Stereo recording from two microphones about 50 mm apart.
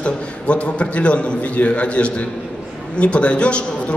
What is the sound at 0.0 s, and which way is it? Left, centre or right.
A man's voice, left.